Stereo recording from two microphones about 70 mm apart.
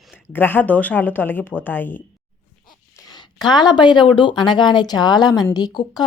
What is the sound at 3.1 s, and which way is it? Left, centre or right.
A woman's voice, left.